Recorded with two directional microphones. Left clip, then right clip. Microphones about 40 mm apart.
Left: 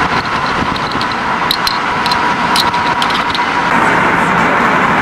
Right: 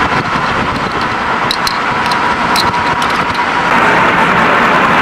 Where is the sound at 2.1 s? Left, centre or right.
Centre.